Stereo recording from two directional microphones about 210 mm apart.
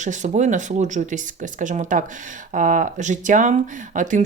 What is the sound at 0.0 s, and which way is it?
Speech, 35° right (ahead or behind).